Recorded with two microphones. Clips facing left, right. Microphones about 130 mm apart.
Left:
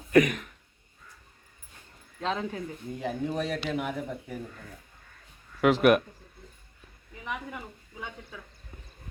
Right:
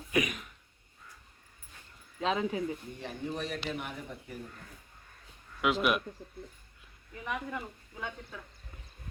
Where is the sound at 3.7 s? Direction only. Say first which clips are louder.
Left 8 dB; 85° left.